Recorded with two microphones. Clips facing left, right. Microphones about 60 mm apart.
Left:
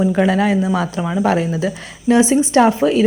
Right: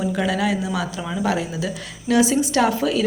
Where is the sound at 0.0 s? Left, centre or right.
Left.